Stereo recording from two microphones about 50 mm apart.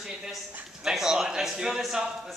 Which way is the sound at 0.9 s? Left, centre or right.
Centre.